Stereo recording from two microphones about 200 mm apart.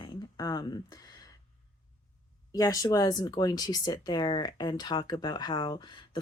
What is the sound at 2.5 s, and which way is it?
Speech, 15° left (ahead or behind).